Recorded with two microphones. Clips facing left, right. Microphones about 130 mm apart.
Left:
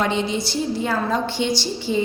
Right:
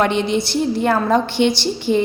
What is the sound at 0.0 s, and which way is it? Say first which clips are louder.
A woman's voice: right 4 dB; 65° right (ahead or behind).